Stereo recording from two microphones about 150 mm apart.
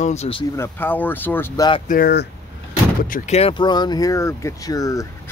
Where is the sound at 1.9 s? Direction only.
85° left.